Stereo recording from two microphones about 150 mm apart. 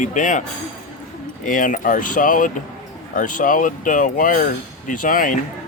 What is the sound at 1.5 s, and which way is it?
Speech, 65° left (ahead or behind).